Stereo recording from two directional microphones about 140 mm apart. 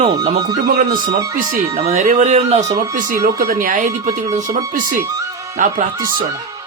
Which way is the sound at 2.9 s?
70° right (ahead or behind).